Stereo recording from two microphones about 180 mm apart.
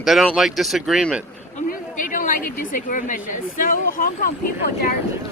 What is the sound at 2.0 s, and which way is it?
A woman's voice, 45° left (ahead or behind).